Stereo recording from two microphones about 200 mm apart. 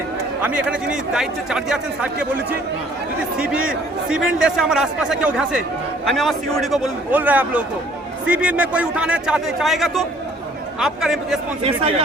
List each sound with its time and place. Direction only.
0.4 s speech: 5° right (ahead or behind)
11.6 s speech: 30° right (ahead or behind)